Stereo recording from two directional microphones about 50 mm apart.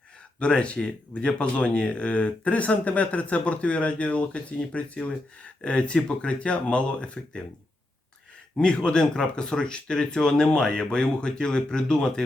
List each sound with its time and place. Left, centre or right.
0.3 s speech: left
8.5 s speech: centre